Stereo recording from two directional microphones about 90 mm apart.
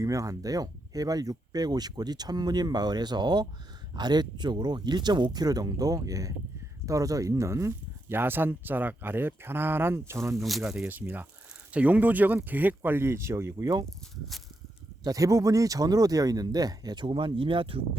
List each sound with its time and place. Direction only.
0.0 s speech: 40° right (ahead or behind)
10.3 s speech: centre (ahead or behind)
11.7 s speech: 15° right (ahead or behind); by 13.8 s 40° right (ahead or behind)
15.0 s speech: 40° right (ahead or behind); by 17.8 s 85° right